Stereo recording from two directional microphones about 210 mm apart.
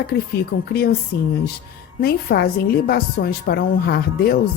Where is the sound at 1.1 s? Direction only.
50° left (ahead or behind).